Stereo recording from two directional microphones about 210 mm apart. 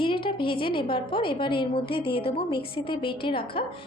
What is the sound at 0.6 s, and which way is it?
A woman's voice, 25° left (ahead or behind).